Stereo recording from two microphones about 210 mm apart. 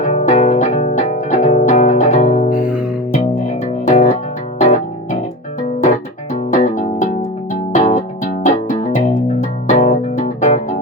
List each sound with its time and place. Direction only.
0.0 s music: 30° left (ahead or behind)
3.7 s music: 35° left (ahead or behind)
6.3 s music: 35° left (ahead or behind)